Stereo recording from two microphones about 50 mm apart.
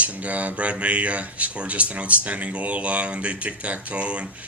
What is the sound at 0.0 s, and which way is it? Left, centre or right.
Speech, right.